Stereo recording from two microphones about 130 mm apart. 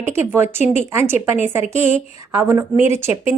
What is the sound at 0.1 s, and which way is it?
Speech, 20° right (ahead or behind).